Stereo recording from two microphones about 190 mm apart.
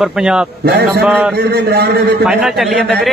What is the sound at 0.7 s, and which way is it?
Speech, 60° right (ahead or behind).